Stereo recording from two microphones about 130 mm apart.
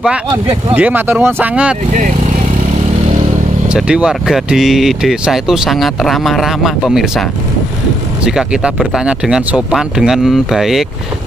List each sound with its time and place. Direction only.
0.7 s speech: 15° right (ahead or behind)
1.9 s speech: 80° right
3.6 s speech: 5° right (ahead or behind)